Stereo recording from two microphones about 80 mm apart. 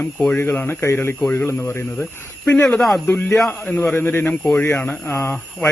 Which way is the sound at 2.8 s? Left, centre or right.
Centre.